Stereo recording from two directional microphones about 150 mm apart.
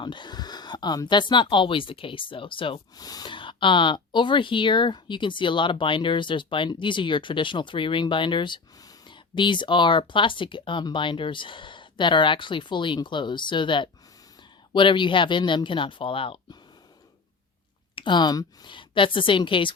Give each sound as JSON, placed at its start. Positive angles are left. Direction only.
{"t": 0.0, "sound": "speech", "side_deg": 30}
{"t": 17.9, "sound": "speech", "side_deg": 30}